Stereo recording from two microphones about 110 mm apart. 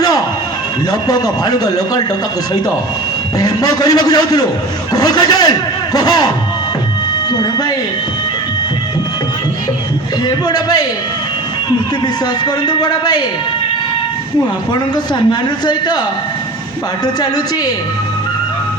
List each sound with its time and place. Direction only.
0.9 s a man's voice: 35° left (ahead or behind)
3.3 s a man's voice: 35° left (ahead or behind)
10.2 s a man's voice: 40° left (ahead or behind)
12.0 s a man's voice: 40° left (ahead or behind)
14.7 s a man's voice: 40° left (ahead or behind)